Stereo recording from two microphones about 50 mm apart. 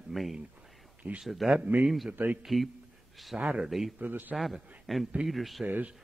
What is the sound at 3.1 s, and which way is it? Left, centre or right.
Speech, centre.